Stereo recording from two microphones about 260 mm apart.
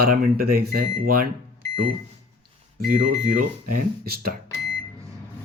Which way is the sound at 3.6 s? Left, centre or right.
Right.